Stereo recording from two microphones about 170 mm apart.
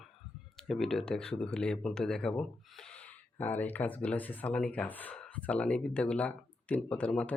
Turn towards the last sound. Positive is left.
turn(degrees=5)  # may be behind; listen again after turning